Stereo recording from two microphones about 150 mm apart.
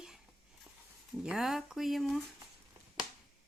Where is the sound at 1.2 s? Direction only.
5° right (ahead or behind).